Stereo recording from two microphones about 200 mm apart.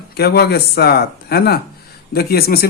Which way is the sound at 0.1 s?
50° left (ahead or behind).